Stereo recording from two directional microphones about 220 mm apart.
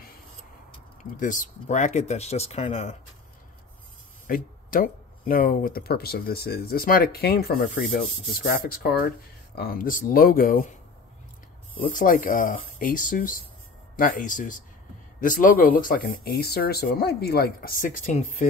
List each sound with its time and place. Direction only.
1.1 s speech: 35° left (ahead or behind)
4.3 s speech: 40° left (ahead or behind)
11.9 s speech: 35° left (ahead or behind)